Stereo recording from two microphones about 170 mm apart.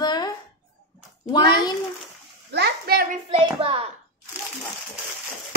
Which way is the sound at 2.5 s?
70° right (ahead or behind).